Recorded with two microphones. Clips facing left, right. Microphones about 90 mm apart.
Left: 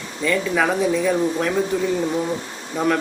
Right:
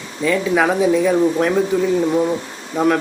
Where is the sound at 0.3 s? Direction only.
5° right (ahead or behind).